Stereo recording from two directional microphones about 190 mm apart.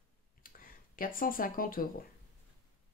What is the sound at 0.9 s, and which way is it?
Speech, 45° left (ahead or behind).